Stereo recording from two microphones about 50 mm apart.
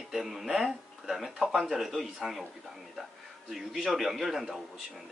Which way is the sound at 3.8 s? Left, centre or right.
Centre.